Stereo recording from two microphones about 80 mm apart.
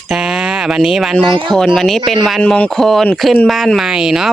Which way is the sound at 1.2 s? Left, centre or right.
Right.